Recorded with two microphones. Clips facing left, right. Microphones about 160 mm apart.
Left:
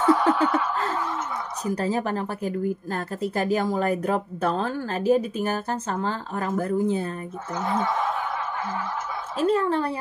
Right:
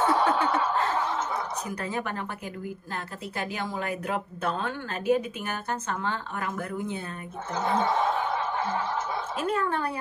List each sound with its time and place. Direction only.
0.0 s snicker: 30° right (ahead or behind)
1.7 s a woman's voice: 35° left (ahead or behind)
7.5 s a woman's voice: 30° right (ahead or behind)
9.4 s a woman's voice: 30° left (ahead or behind)